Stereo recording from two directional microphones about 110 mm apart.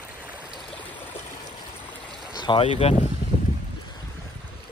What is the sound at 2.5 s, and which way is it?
Speech, 70° left (ahead or behind).